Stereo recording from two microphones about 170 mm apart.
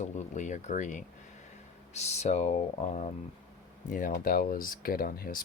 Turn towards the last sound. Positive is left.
turn(degrees=60)  # may be behind; listen again after turning